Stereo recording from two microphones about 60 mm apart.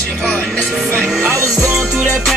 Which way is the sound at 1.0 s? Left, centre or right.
Centre.